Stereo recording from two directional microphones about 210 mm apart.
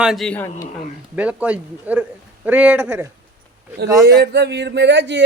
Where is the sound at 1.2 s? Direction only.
5° right (ahead or behind).